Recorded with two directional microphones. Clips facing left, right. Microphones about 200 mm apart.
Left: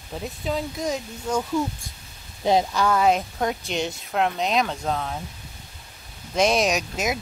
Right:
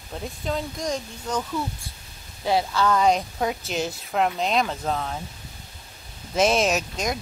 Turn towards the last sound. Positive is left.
turn(degrees=5)  # may be behind; listen again after turning